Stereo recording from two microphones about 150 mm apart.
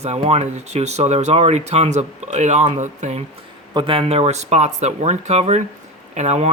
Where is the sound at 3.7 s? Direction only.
35° right (ahead or behind).